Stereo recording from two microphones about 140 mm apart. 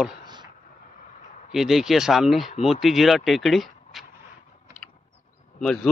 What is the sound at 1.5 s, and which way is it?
Speech, centre (ahead or behind).